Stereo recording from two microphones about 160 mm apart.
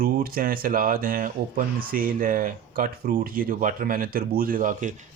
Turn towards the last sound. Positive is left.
turn(degrees=-55)  # may be behind; listen again after turning